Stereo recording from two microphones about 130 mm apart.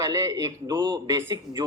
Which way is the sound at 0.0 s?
30° right (ahead or behind).